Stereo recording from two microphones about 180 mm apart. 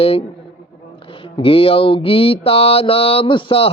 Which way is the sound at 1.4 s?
30° left (ahead or behind).